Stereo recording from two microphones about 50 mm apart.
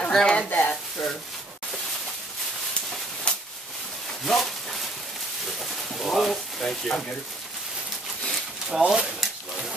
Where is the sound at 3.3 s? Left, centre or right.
Left.